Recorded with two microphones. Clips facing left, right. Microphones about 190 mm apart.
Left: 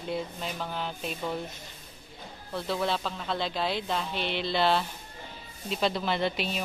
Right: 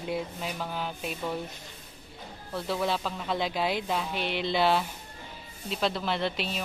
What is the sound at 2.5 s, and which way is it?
A woman's voice, 10° right (ahead or behind).